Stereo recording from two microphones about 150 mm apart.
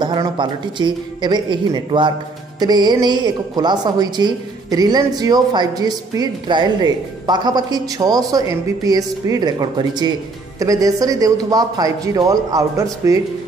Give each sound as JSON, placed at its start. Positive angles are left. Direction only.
{"t": 0.0, "sound": "a woman's voice", "side_deg": -30}